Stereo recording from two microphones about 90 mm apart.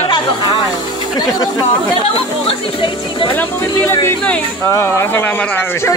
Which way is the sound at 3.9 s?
30° left (ahead or behind).